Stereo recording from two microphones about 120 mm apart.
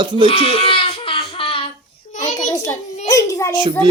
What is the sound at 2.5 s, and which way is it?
Child singing, 25° left (ahead or behind).